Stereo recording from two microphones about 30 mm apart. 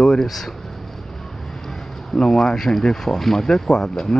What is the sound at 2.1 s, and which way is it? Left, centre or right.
Speech, left.